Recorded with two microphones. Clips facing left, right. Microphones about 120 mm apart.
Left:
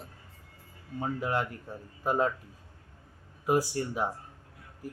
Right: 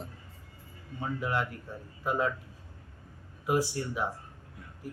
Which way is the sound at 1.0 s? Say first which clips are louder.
Left 1 dB; 40° left (ahead or behind).